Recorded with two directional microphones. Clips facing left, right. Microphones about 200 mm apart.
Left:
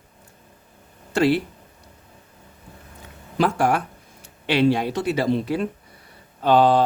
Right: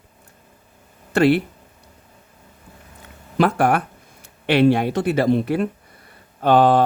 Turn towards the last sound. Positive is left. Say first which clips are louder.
# right 2 dB
turn(degrees=-55)  # may be behind; listen again after turning